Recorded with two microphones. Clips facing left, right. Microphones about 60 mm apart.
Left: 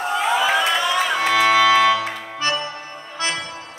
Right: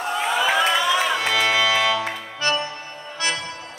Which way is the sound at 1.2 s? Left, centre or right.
Left.